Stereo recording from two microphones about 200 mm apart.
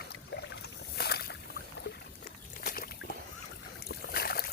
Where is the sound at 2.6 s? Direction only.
50° left (ahead or behind).